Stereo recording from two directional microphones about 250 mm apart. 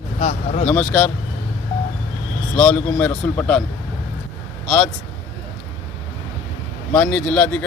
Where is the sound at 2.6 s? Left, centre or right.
Centre.